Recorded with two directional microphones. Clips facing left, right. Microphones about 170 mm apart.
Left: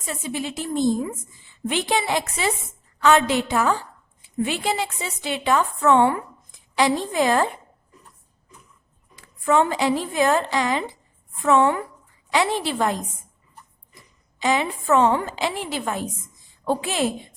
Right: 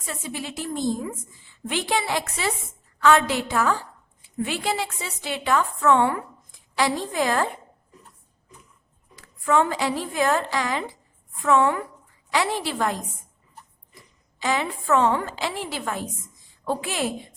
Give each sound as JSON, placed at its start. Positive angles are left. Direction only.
{"t": 0.0, "sound": "a woman's voice", "side_deg": 20}
{"t": 9.2, "sound": "a woman's voice", "side_deg": 20}
{"t": 14.3, "sound": "a woman's voice", "side_deg": 20}